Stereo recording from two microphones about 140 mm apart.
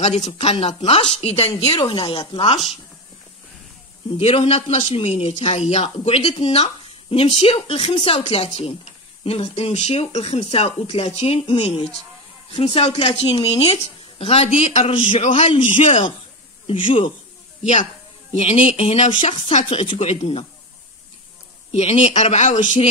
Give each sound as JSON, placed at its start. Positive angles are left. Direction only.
{"t": 0.0, "sound": "speech", "side_deg": 50}
{"t": 4.2, "sound": "speech", "side_deg": 45}
{"t": 15.0, "sound": "a man's voice", "side_deg": 35}
{"t": 15.2, "sound": "a man's voice", "side_deg": 55}
{"t": 16.6, "sound": "a man's voice", "side_deg": 40}
{"t": 18.3, "sound": "speech", "side_deg": 45}
{"t": 21.7, "sound": "speech", "side_deg": 45}